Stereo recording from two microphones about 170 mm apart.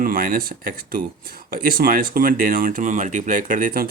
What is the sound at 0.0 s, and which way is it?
Speech, 55° right (ahead or behind).